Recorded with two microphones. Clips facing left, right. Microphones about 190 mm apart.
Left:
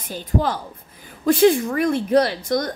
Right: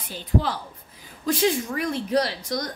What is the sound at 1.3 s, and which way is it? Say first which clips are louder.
A woman's voice: left 8 dB; 55° left (ahead or behind).